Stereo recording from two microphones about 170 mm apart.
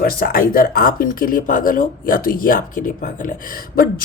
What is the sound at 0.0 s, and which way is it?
Speech, 60° left (ahead or behind).